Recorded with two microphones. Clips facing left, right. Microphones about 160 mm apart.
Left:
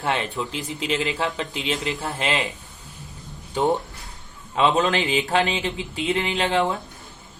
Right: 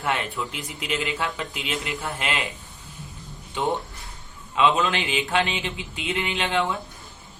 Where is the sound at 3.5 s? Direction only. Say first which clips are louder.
Left 4 dB; 40° left (ahead or behind).